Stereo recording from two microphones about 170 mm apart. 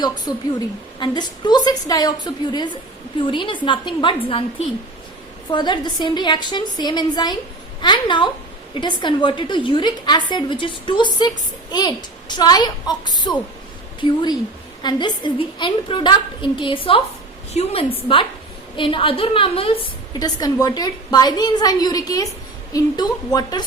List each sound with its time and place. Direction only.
0.3 s a woman's voice: 25° left (ahead or behind)
5.5 s a woman's voice: 25° left (ahead or behind)